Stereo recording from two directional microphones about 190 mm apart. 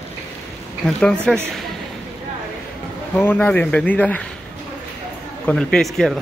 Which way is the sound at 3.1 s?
10° left (ahead or behind).